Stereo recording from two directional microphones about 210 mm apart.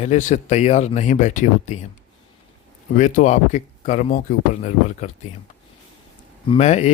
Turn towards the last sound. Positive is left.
turn(degrees=30)  # may be behind; listen again after turning